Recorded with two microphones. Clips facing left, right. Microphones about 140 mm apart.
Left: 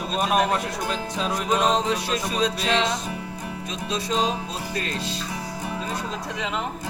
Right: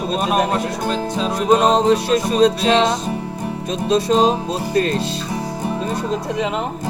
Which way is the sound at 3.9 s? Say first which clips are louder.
Right 10 dB; 60° right (ahead or behind).